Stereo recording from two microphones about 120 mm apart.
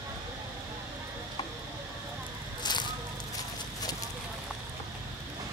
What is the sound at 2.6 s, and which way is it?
Fire, 35° left (ahead or behind).